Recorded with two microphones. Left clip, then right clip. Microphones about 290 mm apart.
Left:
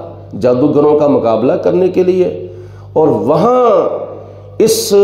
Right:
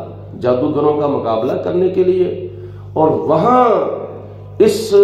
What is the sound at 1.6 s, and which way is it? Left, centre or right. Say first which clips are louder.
A man's voice: left 3 dB; left.